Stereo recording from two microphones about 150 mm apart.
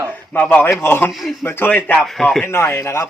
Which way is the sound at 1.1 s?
Centre (ahead or behind).